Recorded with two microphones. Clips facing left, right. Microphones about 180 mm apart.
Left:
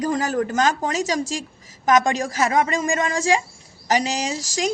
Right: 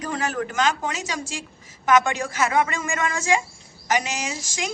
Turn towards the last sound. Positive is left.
turn(degrees=35)  # may be behind; listen again after turning